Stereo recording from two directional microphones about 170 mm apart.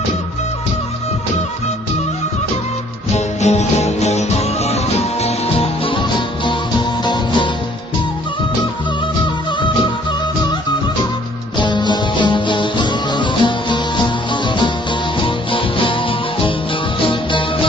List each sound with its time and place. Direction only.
3.2 s music: 40° left (ahead or behind); by 7.5 s 25° left (ahead or behind)
11.5 s music: 25° left (ahead or behind)